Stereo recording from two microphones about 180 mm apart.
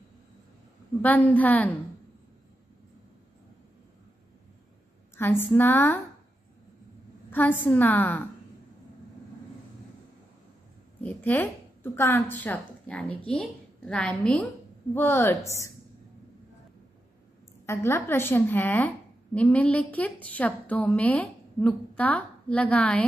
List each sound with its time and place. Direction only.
1.0 s a woman's voice: 10° left (ahead or behind)
5.1 s a sound: 15° left (ahead or behind)
5.6 s a woman's voice: 10° left (ahead or behind)
7.2 s a woman's voice: 10° left (ahead or behind)
11.0 s a woman's voice: 10° left (ahead or behind)
17.6 s a woman's voice: 15° left (ahead or behind)